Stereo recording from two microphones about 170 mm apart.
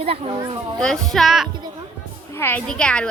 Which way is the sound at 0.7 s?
5° left (ahead or behind).